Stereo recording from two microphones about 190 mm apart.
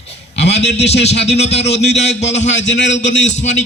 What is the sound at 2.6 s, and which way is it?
Speech, 70° left (ahead or behind).